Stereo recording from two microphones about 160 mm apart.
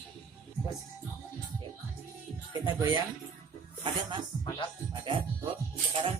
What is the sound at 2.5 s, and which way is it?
Speech, 30° right (ahead or behind).